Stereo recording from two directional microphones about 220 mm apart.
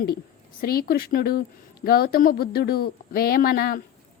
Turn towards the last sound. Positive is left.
turn(degrees=40)  # may be behind; listen again after turning